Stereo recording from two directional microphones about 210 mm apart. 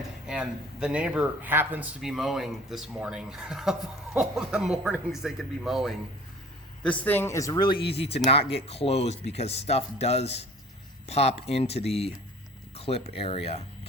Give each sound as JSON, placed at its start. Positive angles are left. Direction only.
{"t": 0.3, "sound": "speech", "side_deg": -5}